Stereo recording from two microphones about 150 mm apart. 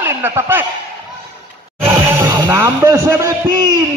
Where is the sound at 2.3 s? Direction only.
20° right (ahead or behind).